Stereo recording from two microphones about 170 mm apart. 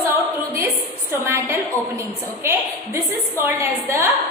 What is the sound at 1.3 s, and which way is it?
A woman's voice, 15° right (ahead or behind).